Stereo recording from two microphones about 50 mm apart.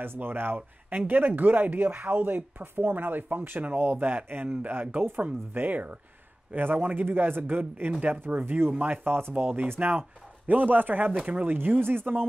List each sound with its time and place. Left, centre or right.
0.0 s speech: right
9.8 s speech: right